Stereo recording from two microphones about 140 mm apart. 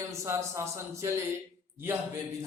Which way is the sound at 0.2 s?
20° right (ahead or behind).